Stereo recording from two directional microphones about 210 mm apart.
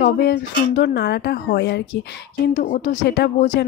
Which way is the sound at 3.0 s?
55° left (ahead or behind).